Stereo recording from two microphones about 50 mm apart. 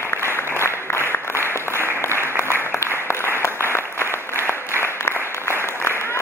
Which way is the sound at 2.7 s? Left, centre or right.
Left.